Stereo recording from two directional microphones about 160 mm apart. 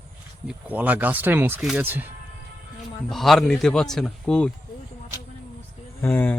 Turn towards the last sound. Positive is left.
turn(degrees=15)  # may be behind; listen again after turning